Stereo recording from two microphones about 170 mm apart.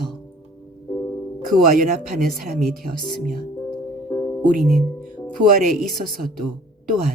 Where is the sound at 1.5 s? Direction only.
55° right (ahead or behind).